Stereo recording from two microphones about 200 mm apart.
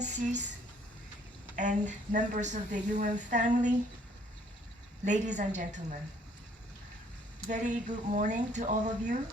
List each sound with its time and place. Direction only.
0.0 s a sound: 35° right (ahead or behind)
1.5 s a woman's voice: 40° right (ahead or behind)
5.0 s a woman's voice: 35° right (ahead or behind)
7.5 s a woman's voice: 35° right (ahead or behind)